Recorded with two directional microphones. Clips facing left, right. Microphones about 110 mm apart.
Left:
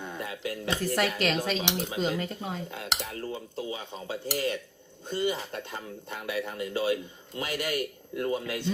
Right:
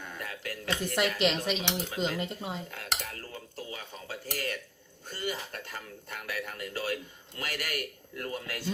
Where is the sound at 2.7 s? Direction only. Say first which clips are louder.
Left 3 dB; 20° left (ahead or behind).